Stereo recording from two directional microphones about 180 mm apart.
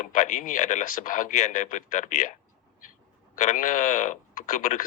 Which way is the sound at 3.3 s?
45° left (ahead or behind).